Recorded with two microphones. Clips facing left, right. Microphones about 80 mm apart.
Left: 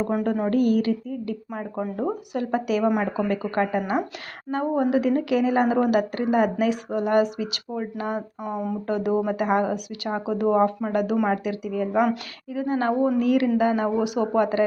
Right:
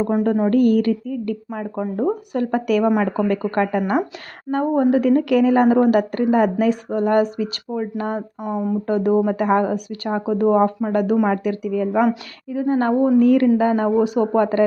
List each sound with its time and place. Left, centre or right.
0.5 s speech: right
1.8 s speech: right
2.3 s speech: right
4.5 s speech: right
8.4 s speech: right
8.9 s speech: right
12.5 s speech: right